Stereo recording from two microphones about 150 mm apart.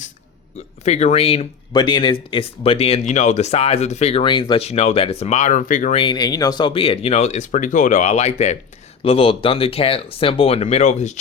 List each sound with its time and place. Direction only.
0.9 s speech: 45° left (ahead or behind)
6.0 s speech: 30° left (ahead or behind); by 8.5 s 50° left (ahead or behind)
9.0 s speech: 40° left (ahead or behind)